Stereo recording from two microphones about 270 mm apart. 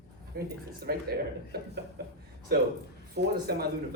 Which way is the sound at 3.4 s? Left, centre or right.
Right.